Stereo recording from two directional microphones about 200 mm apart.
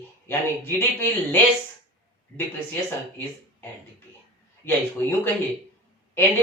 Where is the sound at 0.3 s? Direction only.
10° left (ahead or behind).